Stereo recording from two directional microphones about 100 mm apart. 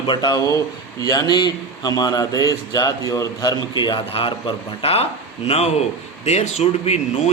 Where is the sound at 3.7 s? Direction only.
50° left (ahead or behind).